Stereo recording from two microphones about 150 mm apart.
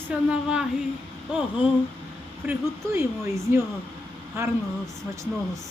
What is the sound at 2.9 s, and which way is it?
Speech, 20° right (ahead or behind).